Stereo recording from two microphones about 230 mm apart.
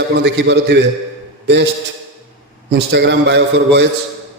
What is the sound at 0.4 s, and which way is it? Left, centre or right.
Speech, right.